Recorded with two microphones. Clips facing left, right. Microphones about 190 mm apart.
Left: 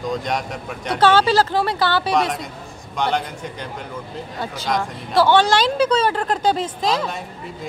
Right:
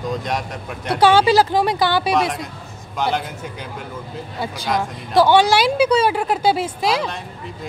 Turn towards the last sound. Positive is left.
turn(degrees=-10)  # may be behind; listen again after turning